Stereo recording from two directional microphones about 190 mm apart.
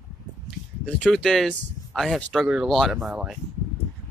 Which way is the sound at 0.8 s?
5° left (ahead or behind).